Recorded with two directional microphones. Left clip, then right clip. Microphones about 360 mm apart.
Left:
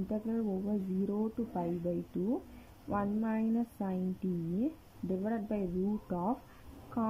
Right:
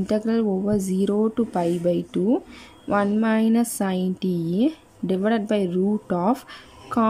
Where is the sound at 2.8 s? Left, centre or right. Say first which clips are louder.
Right 14 dB; centre.